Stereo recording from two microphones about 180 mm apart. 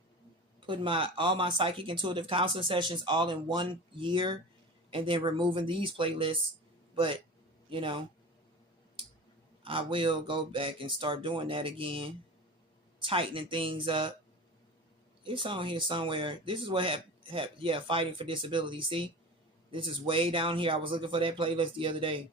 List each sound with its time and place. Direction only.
0.6 s a man's voice: 30° right (ahead or behind)
9.6 s speech: 30° right (ahead or behind)
15.2 s speech: 30° right (ahead or behind)